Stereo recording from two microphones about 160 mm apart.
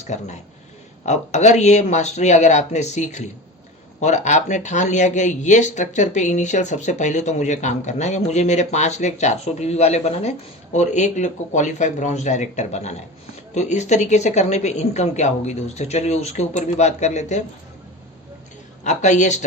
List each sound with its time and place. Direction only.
0.1 s speech: 45° left (ahead or behind)
18.8 s speech: 50° left (ahead or behind)